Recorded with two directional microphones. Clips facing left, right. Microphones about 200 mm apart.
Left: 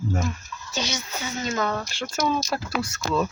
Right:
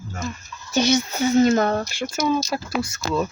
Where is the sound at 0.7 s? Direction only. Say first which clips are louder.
Right 11 dB; 60° right (ahead or behind).